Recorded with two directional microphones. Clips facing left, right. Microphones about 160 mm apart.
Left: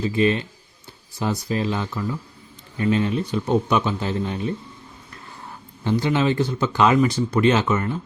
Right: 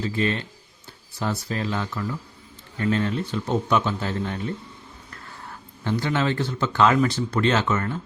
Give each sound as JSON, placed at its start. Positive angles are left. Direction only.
{"t": 0.0, "sound": "speech", "side_deg": 15}
{"t": 5.5, "sound": "speech", "side_deg": 15}